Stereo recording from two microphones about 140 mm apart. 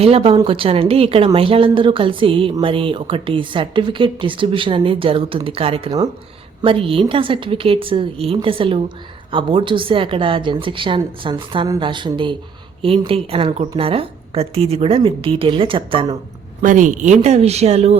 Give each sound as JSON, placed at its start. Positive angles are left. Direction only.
{"t": 0.0, "sound": "speech", "side_deg": -45}
{"t": 16.6, "sound": "speech", "side_deg": -65}